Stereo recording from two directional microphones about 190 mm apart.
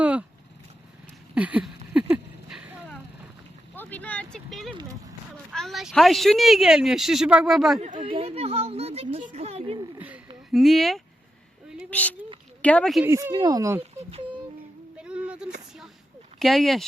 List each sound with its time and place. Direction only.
0.0 s vehicle: 5° right (ahead or behind)
1.4 s a sound: 5° right (ahead or behind)
3.8 s speech: 10° left (ahead or behind)
4.7 s speech: 20° right (ahead or behind)
5.5 s speech: centre (ahead or behind)
7.8 s speech: 40° right (ahead or behind)
8.0 s speech: 30° right (ahead or behind)
10.5 s a child's voice: centre (ahead or behind)
13.1 s speech: 15° right (ahead or behind)
14.9 s a sound: 5° right (ahead or behind)
16.4 s speech: centre (ahead or behind)